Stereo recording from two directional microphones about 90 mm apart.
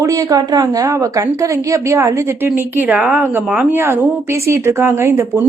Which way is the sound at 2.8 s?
15° right (ahead or behind).